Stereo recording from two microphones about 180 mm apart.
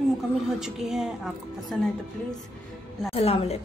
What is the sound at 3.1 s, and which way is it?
Speech, 35° left (ahead or behind).